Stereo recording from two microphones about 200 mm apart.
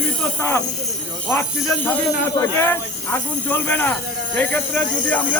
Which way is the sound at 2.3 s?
15° left (ahead or behind).